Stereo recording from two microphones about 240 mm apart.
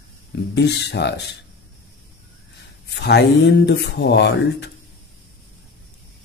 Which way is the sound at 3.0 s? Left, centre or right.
Left.